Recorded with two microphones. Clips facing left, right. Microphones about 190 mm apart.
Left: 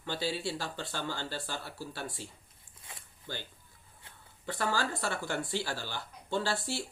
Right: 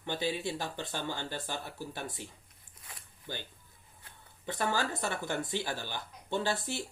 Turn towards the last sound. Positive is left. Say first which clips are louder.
# even
turn(degrees=-20)  # may be behind; listen again after turning